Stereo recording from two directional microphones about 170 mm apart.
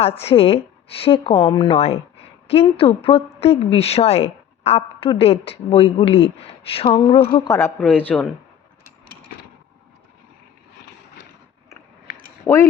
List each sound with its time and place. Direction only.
0.0 s a woman's voice: 35° left (ahead or behind)
7.8 s speech: 10° left (ahead or behind)
12.5 s speech: 15° left (ahead or behind)